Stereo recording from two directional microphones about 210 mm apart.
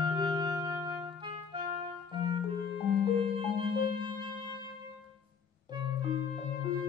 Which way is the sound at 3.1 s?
25° right (ahead or behind).